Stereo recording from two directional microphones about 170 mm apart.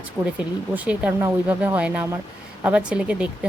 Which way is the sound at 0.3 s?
10° right (ahead or behind).